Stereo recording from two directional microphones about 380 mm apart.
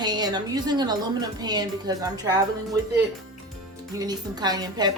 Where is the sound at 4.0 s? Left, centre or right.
Centre.